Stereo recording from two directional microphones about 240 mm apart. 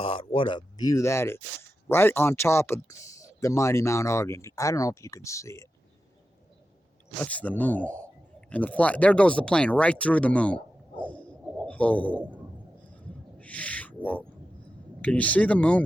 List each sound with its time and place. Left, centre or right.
0.0 s speech: left
7.3 s speech: centre
13.0 s a sound: centre
15.0 s speech: centre